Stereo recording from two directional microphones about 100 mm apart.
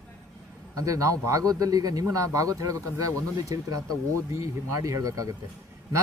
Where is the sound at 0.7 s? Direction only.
35° right (ahead or behind).